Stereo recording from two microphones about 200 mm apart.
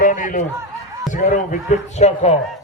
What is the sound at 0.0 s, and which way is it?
Snicker, 40° left (ahead or behind).